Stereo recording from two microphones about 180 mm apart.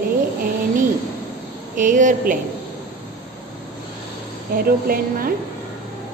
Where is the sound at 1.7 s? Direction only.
45° right (ahead or behind).